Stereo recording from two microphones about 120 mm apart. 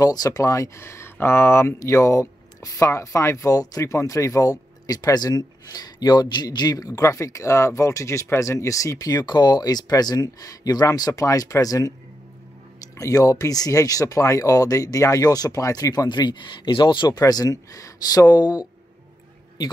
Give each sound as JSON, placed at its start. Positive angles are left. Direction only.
{"t": 0.0, "sound": "speech", "side_deg": 30}
{"t": 12.9, "sound": "speech", "side_deg": 30}